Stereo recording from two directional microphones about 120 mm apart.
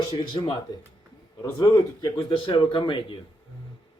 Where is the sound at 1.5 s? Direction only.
40° left (ahead or behind).